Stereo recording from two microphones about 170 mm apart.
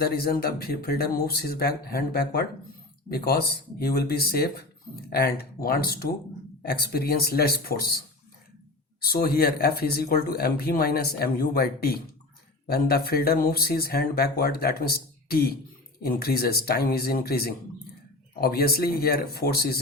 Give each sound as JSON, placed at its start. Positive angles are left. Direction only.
{"t": 0.0, "sound": "speech", "side_deg": 60}
{"t": 9.0, "sound": "speech", "side_deg": 65}